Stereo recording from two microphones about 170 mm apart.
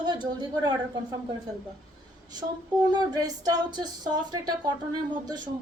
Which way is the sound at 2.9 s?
25° right (ahead or behind).